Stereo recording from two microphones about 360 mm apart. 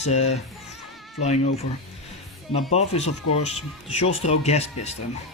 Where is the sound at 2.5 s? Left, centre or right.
Centre.